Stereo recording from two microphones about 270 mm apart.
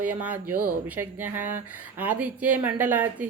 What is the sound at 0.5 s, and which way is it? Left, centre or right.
Speech, right.